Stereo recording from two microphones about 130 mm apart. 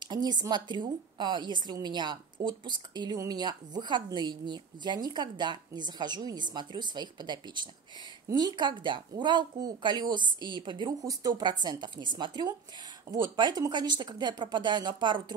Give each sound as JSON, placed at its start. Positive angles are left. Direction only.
{"t": 0.0, "sound": "a woman's voice", "side_deg": -35}